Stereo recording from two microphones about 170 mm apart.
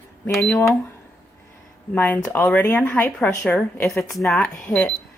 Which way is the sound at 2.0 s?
10° left (ahead or behind).